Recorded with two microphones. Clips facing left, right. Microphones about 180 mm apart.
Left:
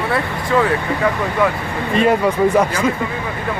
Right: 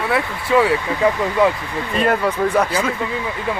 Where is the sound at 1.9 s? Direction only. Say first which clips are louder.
Left 3 dB; 10° left (ahead or behind).